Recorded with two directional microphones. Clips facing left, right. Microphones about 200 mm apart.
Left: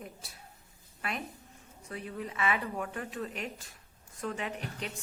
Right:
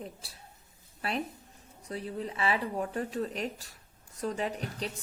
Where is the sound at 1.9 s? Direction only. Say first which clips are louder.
Right 3 dB; 35° right (ahead or behind).